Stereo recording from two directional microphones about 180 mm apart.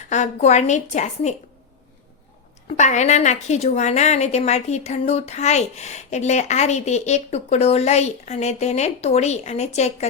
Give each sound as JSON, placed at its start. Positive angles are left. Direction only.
{"t": 0.1, "sound": "a woman's voice", "side_deg": 40}
{"t": 2.6, "sound": "a woman's voice", "side_deg": 40}